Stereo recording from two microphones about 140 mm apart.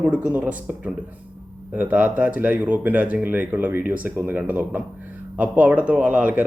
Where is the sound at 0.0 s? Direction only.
10° right (ahead or behind).